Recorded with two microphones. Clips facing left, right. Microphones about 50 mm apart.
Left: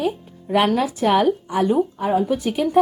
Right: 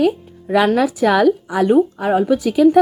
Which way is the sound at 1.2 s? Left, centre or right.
Right.